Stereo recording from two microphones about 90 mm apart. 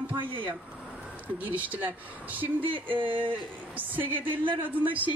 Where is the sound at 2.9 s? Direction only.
70° right (ahead or behind).